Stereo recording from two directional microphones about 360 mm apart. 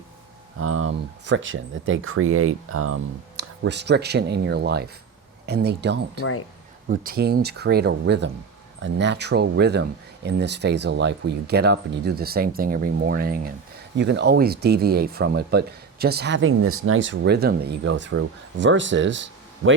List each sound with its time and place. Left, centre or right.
0.6 s speech: right